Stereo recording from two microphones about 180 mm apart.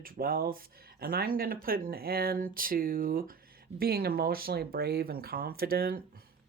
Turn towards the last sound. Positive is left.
turn(degrees=-55)  # may be behind; listen again after turning